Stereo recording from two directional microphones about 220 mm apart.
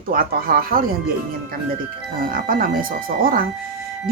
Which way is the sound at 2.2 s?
40° right (ahead or behind).